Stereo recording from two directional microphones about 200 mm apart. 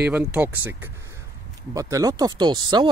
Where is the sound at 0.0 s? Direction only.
5° right (ahead or behind).